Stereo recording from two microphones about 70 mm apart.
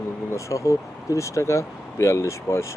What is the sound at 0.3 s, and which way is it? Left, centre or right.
Speech, left.